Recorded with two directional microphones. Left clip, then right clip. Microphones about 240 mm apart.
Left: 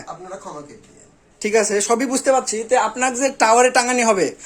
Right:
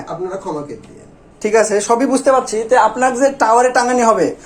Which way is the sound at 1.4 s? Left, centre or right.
Left.